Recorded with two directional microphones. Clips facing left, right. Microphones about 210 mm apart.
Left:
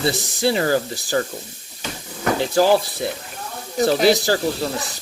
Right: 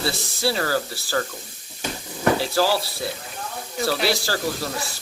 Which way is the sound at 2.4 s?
20° left (ahead or behind).